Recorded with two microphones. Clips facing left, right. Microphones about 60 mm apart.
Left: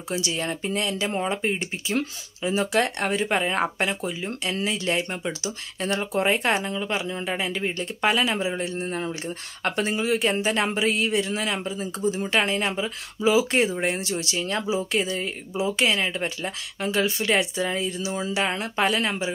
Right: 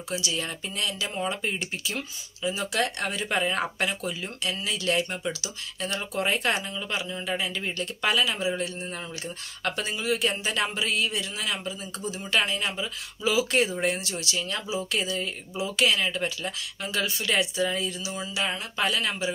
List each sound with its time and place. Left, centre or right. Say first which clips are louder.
0.1 s speech: left 4 dB; left
2.0 s speech: left 7 dB; left